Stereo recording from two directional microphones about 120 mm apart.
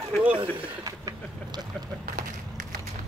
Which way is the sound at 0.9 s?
35° right (ahead or behind).